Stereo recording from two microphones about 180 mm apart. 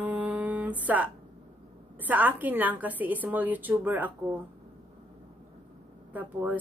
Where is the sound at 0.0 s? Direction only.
10° right (ahead or behind).